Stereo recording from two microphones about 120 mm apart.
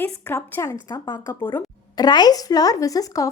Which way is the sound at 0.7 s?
35° left (ahead or behind).